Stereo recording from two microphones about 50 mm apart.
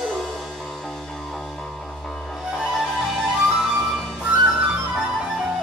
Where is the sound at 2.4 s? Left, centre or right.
Centre.